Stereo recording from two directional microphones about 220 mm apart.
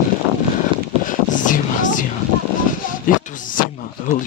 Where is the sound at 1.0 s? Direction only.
35° left (ahead or behind).